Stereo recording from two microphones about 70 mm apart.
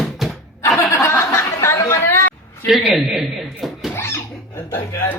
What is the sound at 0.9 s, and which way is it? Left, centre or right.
Speech, left.